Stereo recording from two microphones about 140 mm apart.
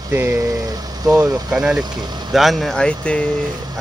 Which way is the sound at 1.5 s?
5° right (ahead or behind).